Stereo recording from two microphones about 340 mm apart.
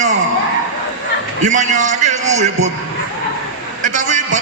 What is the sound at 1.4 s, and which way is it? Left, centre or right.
A man's voice, right.